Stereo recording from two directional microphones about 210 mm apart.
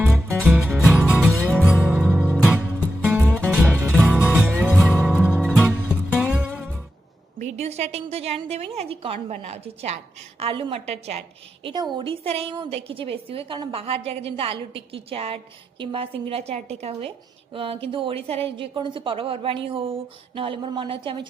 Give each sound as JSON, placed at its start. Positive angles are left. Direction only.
{"t": 0.4, "sound": "music", "side_deg": 0}
{"t": 1.4, "sound": "music", "side_deg": 5}
{"t": 1.6, "sound": "music", "side_deg": -5}
{"t": 7.3, "sound": "a woman's voice", "side_deg": -30}